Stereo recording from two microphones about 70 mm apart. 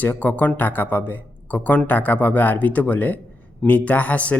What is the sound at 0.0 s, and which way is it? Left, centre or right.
Speech, left.